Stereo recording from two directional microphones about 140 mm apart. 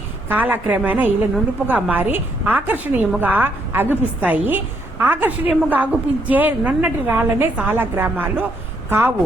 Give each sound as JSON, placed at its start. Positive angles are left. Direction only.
{"t": 0.3, "sound": "a woman's voice", "side_deg": -15}